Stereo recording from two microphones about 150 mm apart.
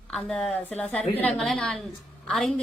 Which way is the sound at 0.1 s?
5° left (ahead or behind).